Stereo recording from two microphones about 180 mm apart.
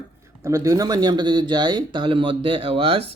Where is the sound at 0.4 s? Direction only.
20° right (ahead or behind).